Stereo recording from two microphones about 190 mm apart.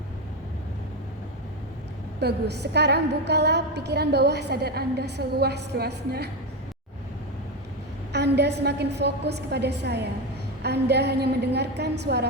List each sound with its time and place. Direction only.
2.2 s a woman's voice: 60° right (ahead or behind)
8.1 s a woman's voice: 60° right (ahead or behind)